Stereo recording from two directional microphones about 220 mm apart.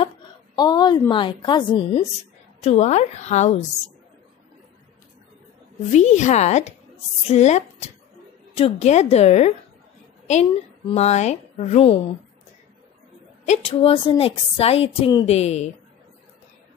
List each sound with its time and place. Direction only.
0.6 s a woman's voice: 20° left (ahead or behind)
5.9 s a woman's voice: 30° left (ahead or behind)
10.9 s a woman's voice: 30° left (ahead or behind)
13.5 s a woman's voice: 25° left (ahead or behind)